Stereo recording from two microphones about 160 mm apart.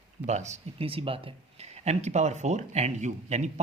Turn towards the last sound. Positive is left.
turn(degrees=-45)  # may be behind; listen again after turning